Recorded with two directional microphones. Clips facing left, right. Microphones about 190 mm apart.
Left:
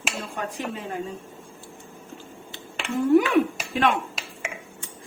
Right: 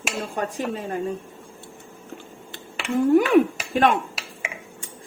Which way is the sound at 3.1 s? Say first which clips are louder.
Right 1 dB; 45° right (ahead or behind).